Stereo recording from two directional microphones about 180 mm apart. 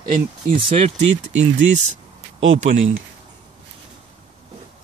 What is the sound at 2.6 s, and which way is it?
Speech, 40° right (ahead or behind).